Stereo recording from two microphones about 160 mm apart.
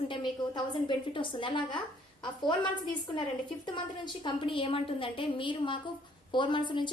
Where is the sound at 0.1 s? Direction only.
30° left (ahead or behind).